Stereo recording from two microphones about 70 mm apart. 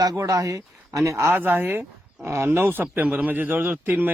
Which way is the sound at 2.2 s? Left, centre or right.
Right.